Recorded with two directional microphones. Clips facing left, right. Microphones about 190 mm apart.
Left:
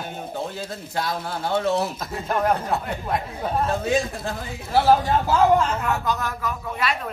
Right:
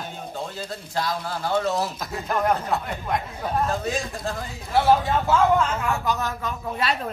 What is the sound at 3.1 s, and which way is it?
Speech, centre (ahead or behind).